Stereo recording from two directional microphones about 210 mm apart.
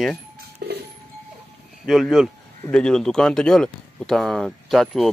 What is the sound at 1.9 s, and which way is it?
Speech, centre (ahead or behind).